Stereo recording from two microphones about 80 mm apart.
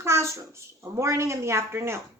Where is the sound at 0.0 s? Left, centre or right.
Right.